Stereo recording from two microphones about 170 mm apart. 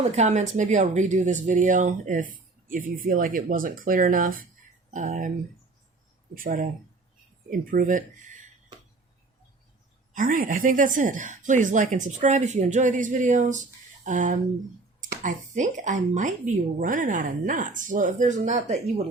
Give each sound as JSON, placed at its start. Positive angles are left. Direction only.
{"t": 0.0, "sound": "a woman's voice", "side_deg": -40}
{"t": 6.3, "sound": "a woman's voice", "side_deg": -55}
{"t": 10.1, "sound": "a woman's voice", "side_deg": -50}